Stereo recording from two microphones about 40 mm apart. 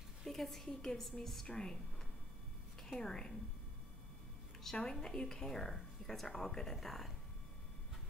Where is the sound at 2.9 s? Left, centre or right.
Centre.